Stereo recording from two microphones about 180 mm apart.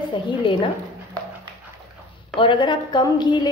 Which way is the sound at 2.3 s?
25° left (ahead or behind).